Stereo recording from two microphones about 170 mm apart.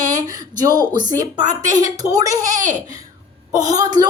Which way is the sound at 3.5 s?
20° right (ahead or behind).